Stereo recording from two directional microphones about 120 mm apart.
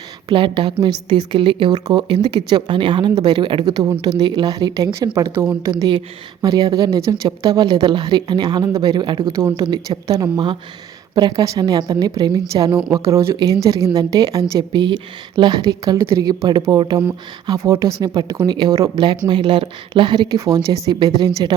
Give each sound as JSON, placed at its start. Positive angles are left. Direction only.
{"t": 0.3, "sound": "a woman's voice", "side_deg": -45}